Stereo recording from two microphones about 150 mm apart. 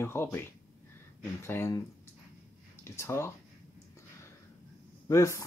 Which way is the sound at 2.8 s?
15° left (ahead or behind).